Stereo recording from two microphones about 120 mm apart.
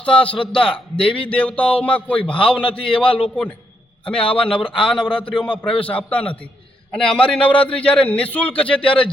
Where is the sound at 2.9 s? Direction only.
45° left (ahead or behind).